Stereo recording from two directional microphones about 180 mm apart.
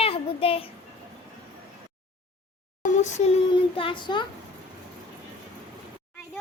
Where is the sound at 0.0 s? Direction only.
30° left (ahead or behind).